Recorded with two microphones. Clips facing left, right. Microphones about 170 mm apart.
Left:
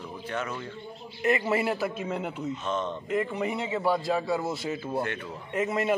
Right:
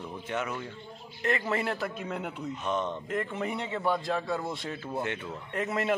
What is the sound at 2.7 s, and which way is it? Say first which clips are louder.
Speech: right 1 dB; 15° right (ahead or behind).